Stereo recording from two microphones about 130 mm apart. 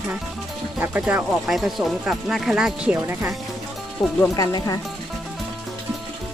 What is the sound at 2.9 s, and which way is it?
Speech, 20° right (ahead or behind).